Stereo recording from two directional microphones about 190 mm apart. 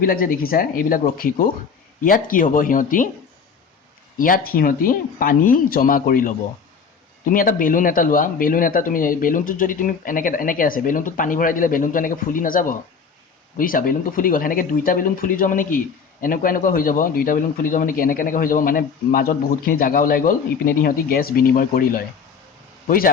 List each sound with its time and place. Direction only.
0.0 s a man's voice: 50° left (ahead or behind)
4.2 s a man's voice: 45° left (ahead or behind)